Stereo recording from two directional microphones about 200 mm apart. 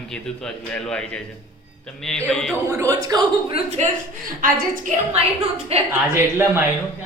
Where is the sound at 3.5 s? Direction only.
30° right (ahead or behind).